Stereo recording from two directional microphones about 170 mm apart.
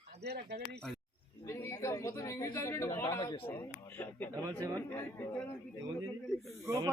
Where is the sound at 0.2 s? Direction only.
75° right (ahead or behind).